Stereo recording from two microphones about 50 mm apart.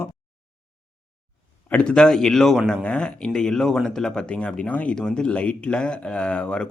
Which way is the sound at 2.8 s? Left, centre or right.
Centre.